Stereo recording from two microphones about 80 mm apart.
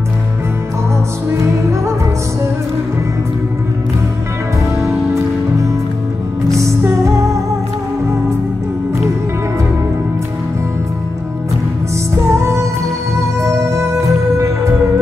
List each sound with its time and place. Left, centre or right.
4.7 s music: right
7.1 s music: right
12.3 s music: right